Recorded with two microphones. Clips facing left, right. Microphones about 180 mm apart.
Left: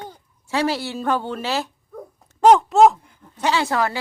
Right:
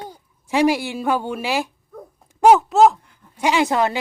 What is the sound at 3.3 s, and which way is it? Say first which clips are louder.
Speech: right 3 dB; 15° right (ahead or behind).